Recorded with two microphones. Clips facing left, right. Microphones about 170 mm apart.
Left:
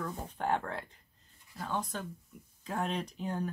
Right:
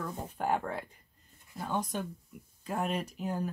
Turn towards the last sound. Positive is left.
turn(degrees=-5)  # may be behind; listen again after turning